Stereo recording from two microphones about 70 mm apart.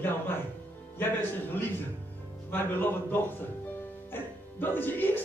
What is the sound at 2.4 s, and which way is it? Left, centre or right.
Speech, left.